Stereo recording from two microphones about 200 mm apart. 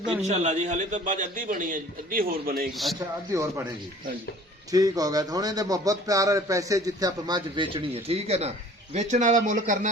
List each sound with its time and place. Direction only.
0.2 s a man's voice: 35° right (ahead or behind)
2.7 s speech: centre (ahead or behind)
3.3 s a man's voice: 15° right (ahead or behind)
4.7 s speech: 20° right (ahead or behind); by 9.9 s 40° right (ahead or behind)